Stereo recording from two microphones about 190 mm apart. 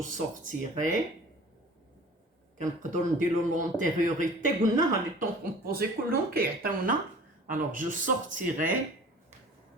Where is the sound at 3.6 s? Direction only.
40° right (ahead or behind).